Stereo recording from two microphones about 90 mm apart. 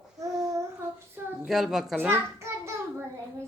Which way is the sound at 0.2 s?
40° right (ahead or behind).